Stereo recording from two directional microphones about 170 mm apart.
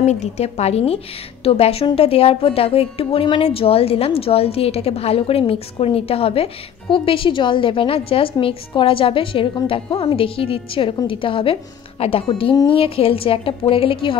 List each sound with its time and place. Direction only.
0.0 s a woman's voice: 40° left (ahead or behind)